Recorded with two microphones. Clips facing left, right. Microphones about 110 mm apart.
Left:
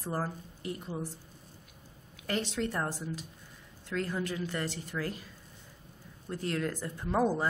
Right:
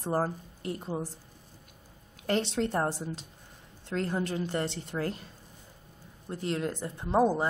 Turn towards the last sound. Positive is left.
turn(degrees=-25)  # may be behind; listen again after turning